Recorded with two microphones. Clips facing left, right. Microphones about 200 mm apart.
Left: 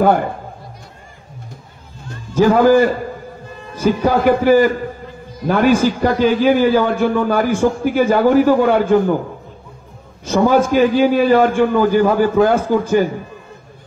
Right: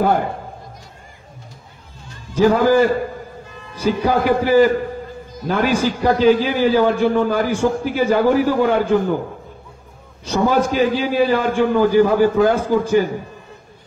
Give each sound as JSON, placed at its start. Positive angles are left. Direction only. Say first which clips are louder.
{"t": 2.0, "sound": "a man's voice", "louder": "left 1 dB", "side_deg": 50}
{"t": 10.2, "sound": "a man's voice", "louder": "left 3 dB", "side_deg": 50}